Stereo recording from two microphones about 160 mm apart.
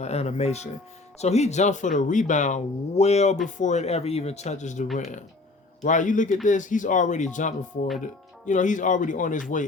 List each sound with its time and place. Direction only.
0.0 s speech: 40° left (ahead or behind)